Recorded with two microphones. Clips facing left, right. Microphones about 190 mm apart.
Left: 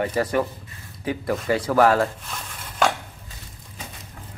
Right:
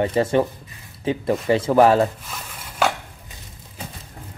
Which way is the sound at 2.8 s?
5° right (ahead or behind).